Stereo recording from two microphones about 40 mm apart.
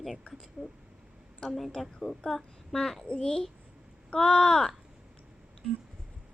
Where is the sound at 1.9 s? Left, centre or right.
Centre.